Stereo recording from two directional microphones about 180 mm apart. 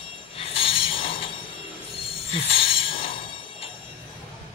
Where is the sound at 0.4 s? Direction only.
30° left (ahead or behind).